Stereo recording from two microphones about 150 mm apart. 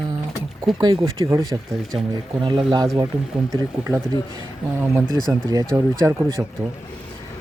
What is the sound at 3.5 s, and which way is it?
Speech, 20° right (ahead or behind).